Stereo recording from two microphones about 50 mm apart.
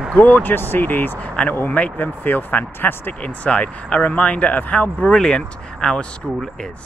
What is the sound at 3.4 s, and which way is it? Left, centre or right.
Speech, left.